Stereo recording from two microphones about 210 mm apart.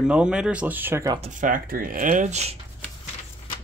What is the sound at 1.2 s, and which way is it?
Speech, 35° right (ahead or behind).